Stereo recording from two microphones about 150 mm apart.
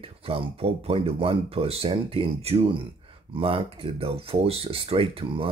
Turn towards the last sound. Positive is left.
turn(degrees=-40)  # may be behind; listen again after turning